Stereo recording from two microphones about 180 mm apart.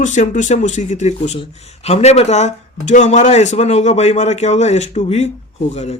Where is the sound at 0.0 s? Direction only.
45° left (ahead or behind).